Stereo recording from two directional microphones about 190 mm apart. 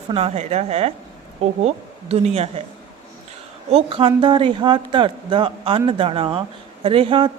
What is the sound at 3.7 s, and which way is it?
Speech, 30° right (ahead or behind).